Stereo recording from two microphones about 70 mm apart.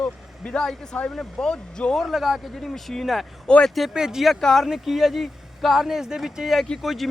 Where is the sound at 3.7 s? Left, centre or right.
Centre.